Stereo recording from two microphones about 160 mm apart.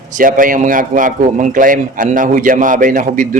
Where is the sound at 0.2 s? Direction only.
60° right (ahead or behind).